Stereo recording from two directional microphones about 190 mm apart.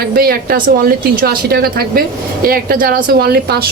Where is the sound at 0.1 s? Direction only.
50° right (ahead or behind).